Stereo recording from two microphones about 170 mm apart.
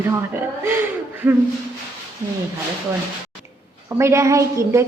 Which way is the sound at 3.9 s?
15° right (ahead or behind).